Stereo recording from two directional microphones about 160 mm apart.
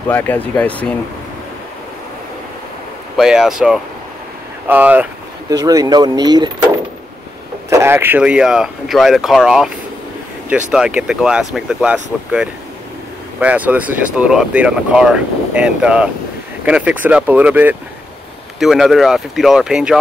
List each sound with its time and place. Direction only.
0.1 s speech: 10° left (ahead or behind)
3.2 s speech: 5° right (ahead or behind)
5.5 s speech: 20° right (ahead or behind)
7.7 s speech: 15° right (ahead or behind)